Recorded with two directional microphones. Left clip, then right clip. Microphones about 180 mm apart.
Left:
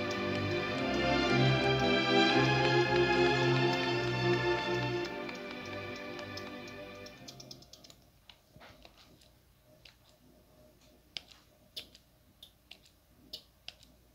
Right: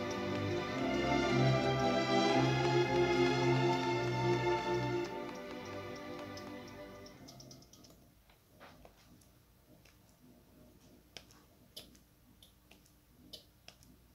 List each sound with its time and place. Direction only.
0.0 s music: 20° left (ahead or behind)